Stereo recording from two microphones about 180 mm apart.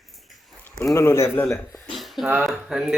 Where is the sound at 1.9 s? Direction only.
Centre (ahead or behind).